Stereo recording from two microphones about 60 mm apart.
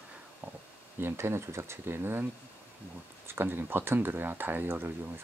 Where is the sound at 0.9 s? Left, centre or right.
Right.